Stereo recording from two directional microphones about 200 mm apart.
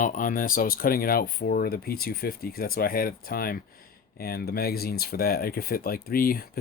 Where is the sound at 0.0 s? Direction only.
40° left (ahead or behind).